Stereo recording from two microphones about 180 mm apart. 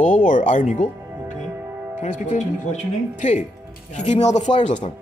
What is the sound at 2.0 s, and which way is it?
Speech, 45° left (ahead or behind).